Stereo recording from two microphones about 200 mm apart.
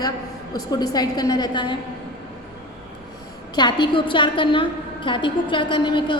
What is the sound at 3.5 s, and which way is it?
A woman's voice, 20° left (ahead or behind).